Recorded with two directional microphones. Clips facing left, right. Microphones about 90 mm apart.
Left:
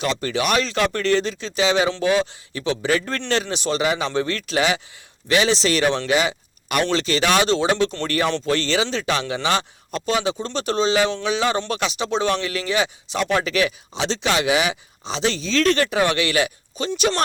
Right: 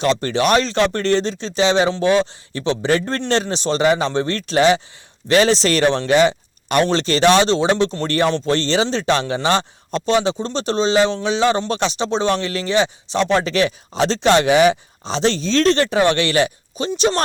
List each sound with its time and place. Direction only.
0.0 s speech: 40° right (ahead or behind)
8.0 s speech: 35° right (ahead or behind)
16.7 s speech: 25° right (ahead or behind)